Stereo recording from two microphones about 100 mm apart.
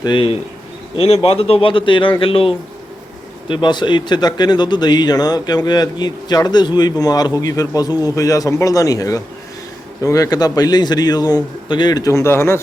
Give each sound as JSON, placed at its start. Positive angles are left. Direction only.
{"t": 0.0, "sound": "a man's voice", "side_deg": 55}
{"t": 0.9, "sound": "a man's voice", "side_deg": 75}
{"t": 3.5, "sound": "a man's voice", "side_deg": 50}
{"t": 12.1, "sound": "speech", "side_deg": 25}